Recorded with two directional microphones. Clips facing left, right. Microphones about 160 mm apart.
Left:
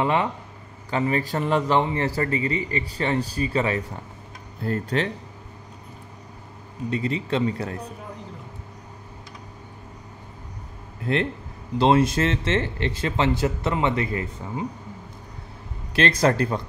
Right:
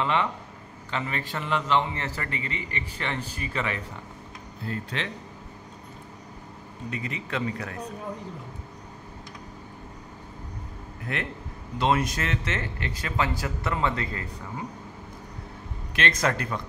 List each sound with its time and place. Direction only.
0.0 s speech: 25° left (ahead or behind)
0.8 s speech: 40° left (ahead or behind)
6.9 s speech: 30° left (ahead or behind)
11.1 s speech: 30° left (ahead or behind)
15.9 s speech: 35° left (ahead or behind)